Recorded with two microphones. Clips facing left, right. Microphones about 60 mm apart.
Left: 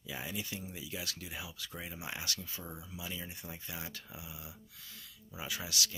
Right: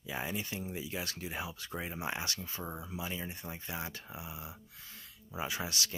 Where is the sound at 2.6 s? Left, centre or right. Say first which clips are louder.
Right 5 dB; right.